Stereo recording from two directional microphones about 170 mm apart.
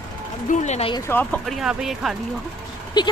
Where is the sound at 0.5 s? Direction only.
40° left (ahead or behind).